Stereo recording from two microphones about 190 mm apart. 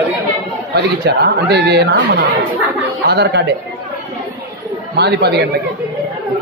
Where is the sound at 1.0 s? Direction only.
60° right (ahead or behind).